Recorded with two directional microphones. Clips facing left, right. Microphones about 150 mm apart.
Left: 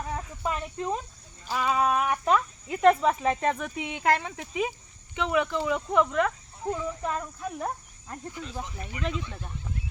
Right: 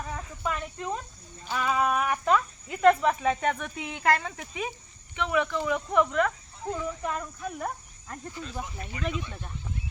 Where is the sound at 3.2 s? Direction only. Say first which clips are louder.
Left 1 dB; 25° left (ahead or behind).